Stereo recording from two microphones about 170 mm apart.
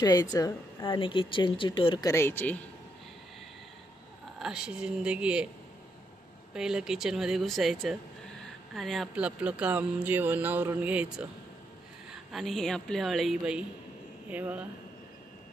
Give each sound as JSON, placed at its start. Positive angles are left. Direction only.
{"t": 0.0, "sound": "a woman's voice", "side_deg": 20}
{"t": 4.4, "sound": "speech", "side_deg": -5}
{"t": 6.5, "sound": "speech", "side_deg": -5}
{"t": 12.3, "sound": "speech", "side_deg": 0}